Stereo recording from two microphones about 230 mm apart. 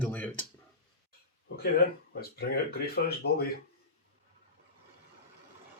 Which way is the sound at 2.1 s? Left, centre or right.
Left.